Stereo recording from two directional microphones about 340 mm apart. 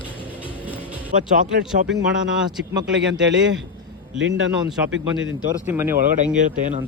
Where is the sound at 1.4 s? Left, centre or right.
Right.